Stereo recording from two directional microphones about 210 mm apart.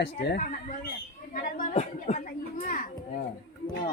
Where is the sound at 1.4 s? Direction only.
40° left (ahead or behind).